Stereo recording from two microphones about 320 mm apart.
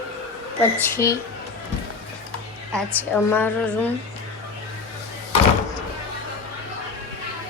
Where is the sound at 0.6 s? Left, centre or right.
Centre.